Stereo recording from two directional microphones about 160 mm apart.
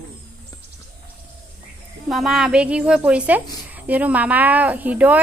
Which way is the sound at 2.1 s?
Centre (ahead or behind).